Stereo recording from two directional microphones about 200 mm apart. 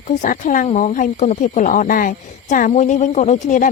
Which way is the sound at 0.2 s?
40° left (ahead or behind).